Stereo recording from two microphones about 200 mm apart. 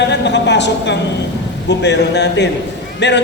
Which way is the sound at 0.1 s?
60° left (ahead or behind).